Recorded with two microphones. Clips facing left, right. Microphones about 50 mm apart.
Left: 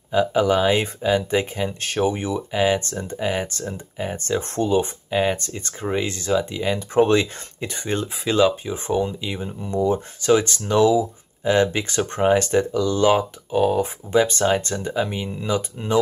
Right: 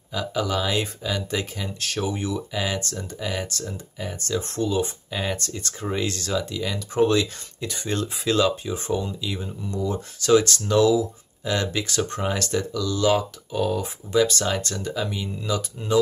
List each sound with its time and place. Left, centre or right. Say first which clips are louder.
0.1 s speech: left 8 dB; left